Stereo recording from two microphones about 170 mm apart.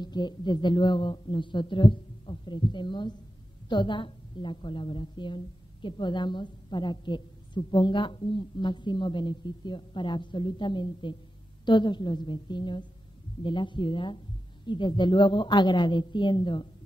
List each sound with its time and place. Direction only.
0.0 s a woman's voice: 25° left (ahead or behind)